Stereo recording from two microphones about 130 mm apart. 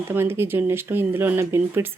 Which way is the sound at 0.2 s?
20° right (ahead or behind).